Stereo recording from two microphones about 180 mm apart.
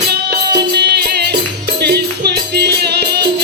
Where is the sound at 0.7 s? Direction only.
65° right (ahead or behind).